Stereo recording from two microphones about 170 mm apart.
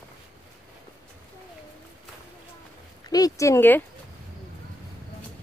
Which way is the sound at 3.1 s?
20° left (ahead or behind).